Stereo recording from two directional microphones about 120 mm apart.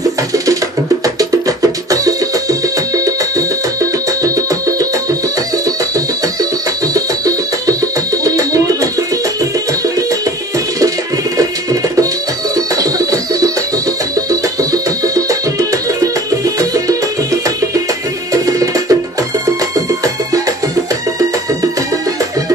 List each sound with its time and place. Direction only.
1.6 s music: 30° right (ahead or behind)
6.9 s music: 30° right (ahead or behind)
11.3 s music: 30° right (ahead or behind)
14.6 s music: 30° right (ahead or behind)
16.5 s music: 30° right (ahead or behind)
18.3 s music: 30° right (ahead or behind)